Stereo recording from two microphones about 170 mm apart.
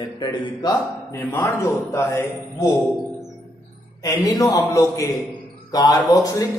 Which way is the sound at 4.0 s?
20° left (ahead or behind).